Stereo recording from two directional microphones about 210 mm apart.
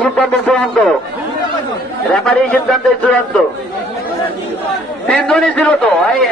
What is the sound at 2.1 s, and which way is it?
A man's voice, 5° left (ahead or behind).